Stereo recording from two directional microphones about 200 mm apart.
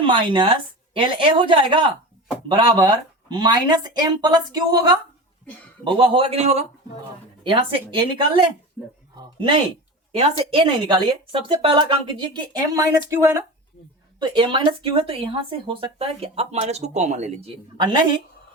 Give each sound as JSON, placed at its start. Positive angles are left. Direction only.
{"t": 0.0, "sound": "speech", "side_deg": -25}
{"t": 8.8, "sound": "speech", "side_deg": -5}
{"t": 9.1, "sound": "speech", "side_deg": -25}